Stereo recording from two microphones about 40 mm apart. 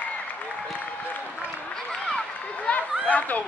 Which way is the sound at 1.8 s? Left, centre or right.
Left.